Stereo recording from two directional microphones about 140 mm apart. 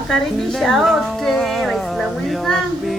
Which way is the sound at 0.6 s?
Centre (ahead or behind).